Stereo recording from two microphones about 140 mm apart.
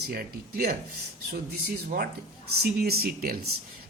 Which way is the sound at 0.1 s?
90° right.